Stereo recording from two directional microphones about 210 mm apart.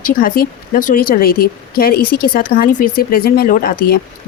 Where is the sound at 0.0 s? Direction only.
40° left (ahead or behind).